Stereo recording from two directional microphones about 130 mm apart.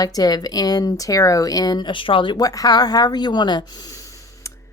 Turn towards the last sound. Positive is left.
turn(degrees=35)  # may be behind; listen again after turning